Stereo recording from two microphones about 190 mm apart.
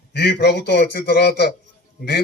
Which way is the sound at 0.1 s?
55° left (ahead or behind).